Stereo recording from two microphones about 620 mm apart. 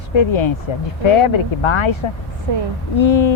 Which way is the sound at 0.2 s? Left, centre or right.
Left.